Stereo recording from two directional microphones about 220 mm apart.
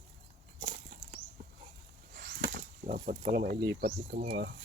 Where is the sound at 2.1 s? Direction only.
45° right (ahead or behind).